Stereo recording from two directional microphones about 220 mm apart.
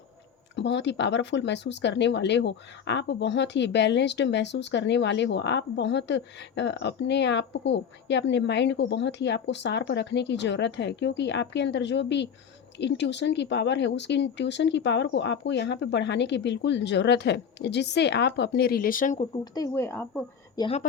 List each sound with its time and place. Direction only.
0.5 s speech: 50° left (ahead or behind); by 19.3 s 35° left (ahead or behind)
19.5 s a woman's voice: 15° left (ahead or behind)
20.6 s speech: 25° left (ahead or behind)